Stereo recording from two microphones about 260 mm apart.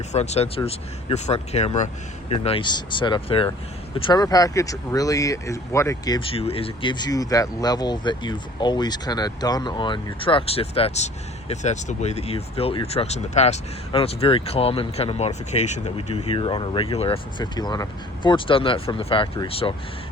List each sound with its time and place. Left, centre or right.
0.1 s speech: left